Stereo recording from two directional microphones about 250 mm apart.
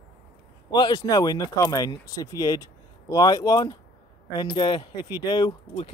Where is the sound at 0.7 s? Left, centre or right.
Centre.